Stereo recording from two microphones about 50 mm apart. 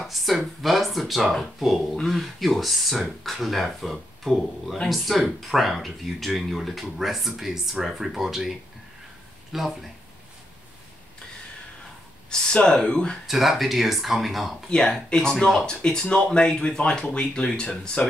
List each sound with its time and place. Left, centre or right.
0.0 s speech: centre
12.5 s speech: centre
13.3 s speech: centre
15.6 s speech: centre